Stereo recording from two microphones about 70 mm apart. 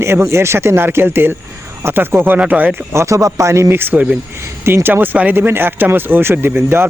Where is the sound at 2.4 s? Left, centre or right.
Right.